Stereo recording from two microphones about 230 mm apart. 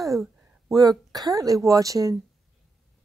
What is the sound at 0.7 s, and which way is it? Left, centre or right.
Speech, centre.